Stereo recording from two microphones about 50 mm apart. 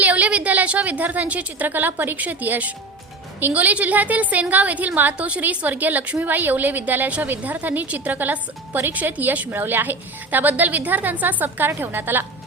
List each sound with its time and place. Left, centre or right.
0.0 s a woman's voice: right
6.1 s a woman's voice: right
9.5 s a woman's voice: right